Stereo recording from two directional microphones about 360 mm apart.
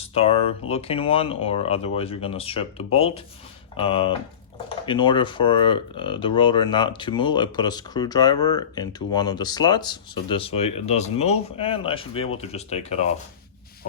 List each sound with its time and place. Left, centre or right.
0.0 s speech: centre